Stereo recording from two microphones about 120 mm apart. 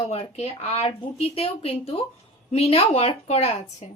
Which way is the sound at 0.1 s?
60° left (ahead or behind).